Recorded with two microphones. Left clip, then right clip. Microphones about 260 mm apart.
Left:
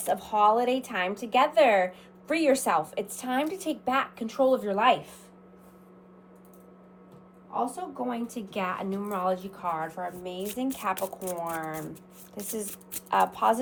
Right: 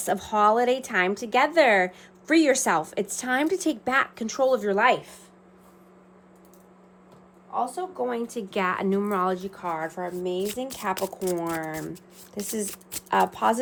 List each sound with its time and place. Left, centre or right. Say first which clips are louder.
0.0 s a woman's voice: right 2 dB; right
7.5 s a woman's voice: right 3 dB; right
12.6 s speech: right 5 dB; centre
13.1 s a woman's voice: right 1 dB; right